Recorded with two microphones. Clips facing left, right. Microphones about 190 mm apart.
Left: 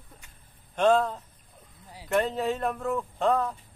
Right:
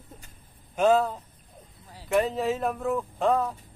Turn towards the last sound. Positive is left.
turn(degrees=-5)  # may be behind; listen again after turning